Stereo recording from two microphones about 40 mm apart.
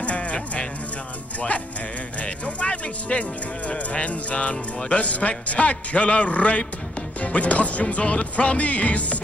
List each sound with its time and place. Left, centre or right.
0.0 s music: left
2.1 s speech: left